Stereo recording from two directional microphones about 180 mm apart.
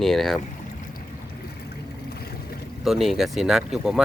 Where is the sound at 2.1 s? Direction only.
60° left (ahead or behind).